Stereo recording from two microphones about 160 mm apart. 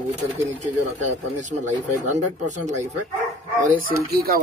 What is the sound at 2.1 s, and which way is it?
Speech, 50° right (ahead or behind).